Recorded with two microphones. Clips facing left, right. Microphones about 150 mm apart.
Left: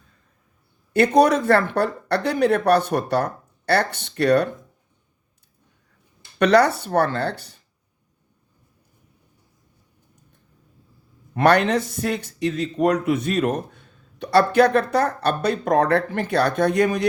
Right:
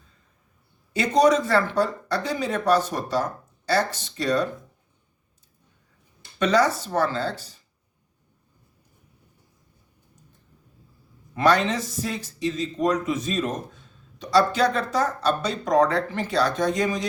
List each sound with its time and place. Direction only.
0.9 s speech: 60° left (ahead or behind)
6.4 s speech: 65° left (ahead or behind)
11.3 s speech: 60° left (ahead or behind)